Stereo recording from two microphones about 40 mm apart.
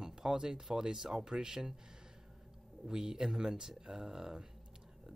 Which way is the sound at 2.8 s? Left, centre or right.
Centre.